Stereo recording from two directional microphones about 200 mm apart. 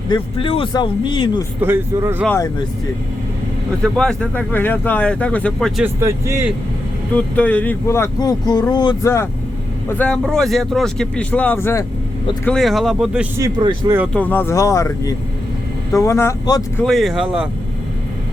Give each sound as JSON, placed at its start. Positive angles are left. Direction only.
{"t": 0.1, "sound": "speech", "side_deg": 25}
{"t": 1.6, "sound": "speech", "side_deg": -10}
{"t": 2.2, "sound": "speech", "side_deg": 10}
{"t": 3.8, "sound": "speech", "side_deg": 5}
{"t": 5.8, "sound": "speech", "side_deg": -15}
{"t": 7.1, "sound": "speech", "side_deg": 5}
{"t": 10.0, "sound": "speech", "side_deg": 5}
{"t": 12.5, "sound": "speech", "side_deg": 0}
{"t": 13.4, "sound": "speech", "side_deg": -25}
{"t": 14.1, "sound": "speech", "side_deg": 10}
{"t": 16.8, "sound": "speech", "side_deg": 0}